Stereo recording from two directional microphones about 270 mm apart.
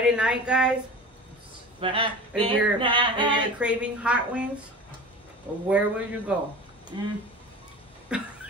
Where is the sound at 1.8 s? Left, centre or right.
Centre.